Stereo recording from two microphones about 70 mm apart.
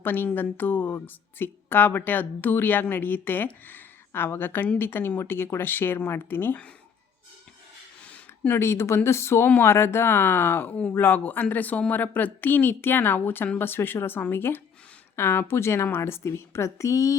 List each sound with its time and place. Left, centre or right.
0.0 s speech: left
8.4 s speech: left